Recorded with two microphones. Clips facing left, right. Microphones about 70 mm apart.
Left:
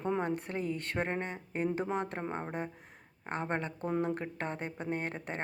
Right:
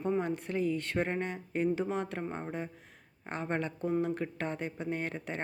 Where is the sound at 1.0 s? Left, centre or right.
Left.